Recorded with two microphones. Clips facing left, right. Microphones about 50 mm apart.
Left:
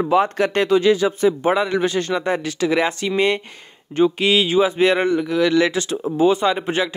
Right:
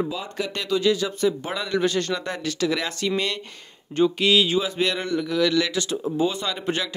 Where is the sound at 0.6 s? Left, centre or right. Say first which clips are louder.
Left 4 dB; left.